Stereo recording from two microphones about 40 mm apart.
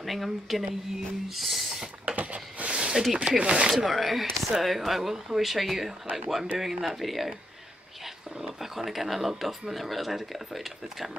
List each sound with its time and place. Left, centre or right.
0.0 s speech: centre
2.1 s a sound: right
2.9 s speech: centre
3.2 s speech: right
3.7 s speech: centre
8.5 s speech: centre